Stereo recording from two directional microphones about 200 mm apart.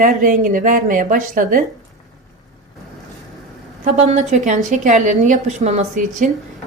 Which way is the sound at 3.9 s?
35° right (ahead or behind).